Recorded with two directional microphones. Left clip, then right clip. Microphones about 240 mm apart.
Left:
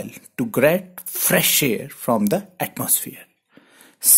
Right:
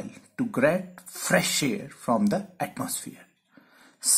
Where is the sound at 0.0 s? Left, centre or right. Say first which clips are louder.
Left 5 dB; left.